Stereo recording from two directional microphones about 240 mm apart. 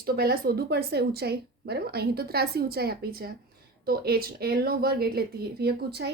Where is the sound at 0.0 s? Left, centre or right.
Right.